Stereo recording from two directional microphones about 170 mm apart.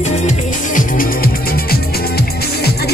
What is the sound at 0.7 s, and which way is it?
Music, 55° left (ahead or behind).